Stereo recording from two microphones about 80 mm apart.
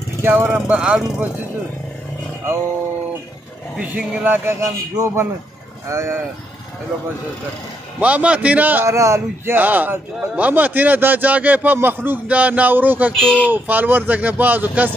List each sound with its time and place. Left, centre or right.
0.2 s speech: right
0.5 s a man's voice: centre
3.8 s a man's voice: centre
4.5 s speech: right
8.0 s a man's voice: centre
8.8 s speech: right
9.6 s a man's voice: right
13.1 s speech: centre
13.5 s a man's voice: right